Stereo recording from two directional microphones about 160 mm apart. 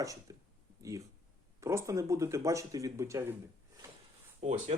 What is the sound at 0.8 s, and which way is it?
Speech, 20° right (ahead or behind).